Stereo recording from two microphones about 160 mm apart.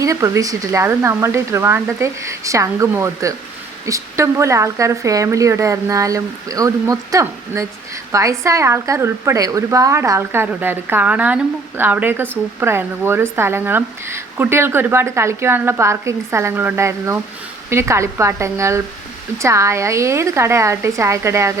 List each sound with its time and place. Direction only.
0.0 s a woman's voice: 20° right (ahead or behind)